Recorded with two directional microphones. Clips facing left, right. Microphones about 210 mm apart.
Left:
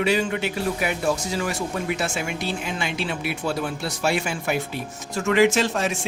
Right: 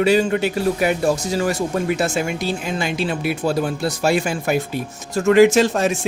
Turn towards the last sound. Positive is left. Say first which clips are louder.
# right 6 dB
turn(degrees=-40)  # may be behind; listen again after turning